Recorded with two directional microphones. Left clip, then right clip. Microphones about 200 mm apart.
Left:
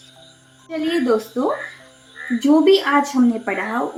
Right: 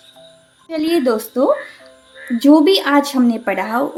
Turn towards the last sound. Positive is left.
turn(degrees=-50)  # may be behind; listen again after turning